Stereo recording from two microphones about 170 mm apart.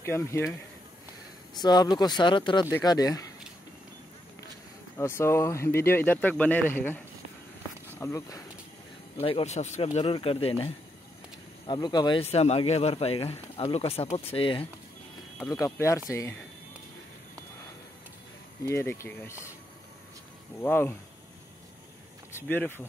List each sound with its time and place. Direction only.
0.0 s speech: 15° left (ahead or behind)
1.5 s speech: 25° left (ahead or behind)
4.9 s speech: 15° left (ahead or behind)
9.2 s speech: 35° left (ahead or behind)
15.5 s speech: 20° left (ahead or behind)
18.6 s speech: 15° left (ahead or behind)
20.6 s speech: 10° left (ahead or behind)
22.3 s speech: 10° left (ahead or behind)